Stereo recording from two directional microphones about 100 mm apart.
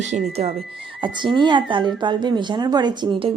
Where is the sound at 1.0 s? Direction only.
50° right (ahead or behind).